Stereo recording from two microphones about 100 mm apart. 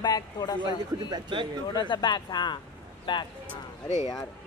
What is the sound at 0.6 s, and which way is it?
A man's voice, 55° right (ahead or behind).